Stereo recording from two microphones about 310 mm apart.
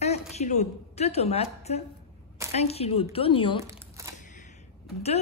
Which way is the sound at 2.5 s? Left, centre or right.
Centre.